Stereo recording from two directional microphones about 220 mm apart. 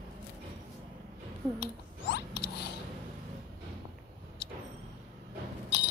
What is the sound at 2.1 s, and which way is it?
Zipper, 50° left (ahead or behind).